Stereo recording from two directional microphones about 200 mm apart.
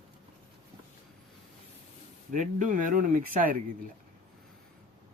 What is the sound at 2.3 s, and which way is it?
Speech, 40° right (ahead or behind).